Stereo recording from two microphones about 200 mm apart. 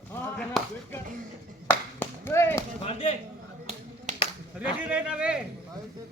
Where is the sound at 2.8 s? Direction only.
30° left (ahead or behind).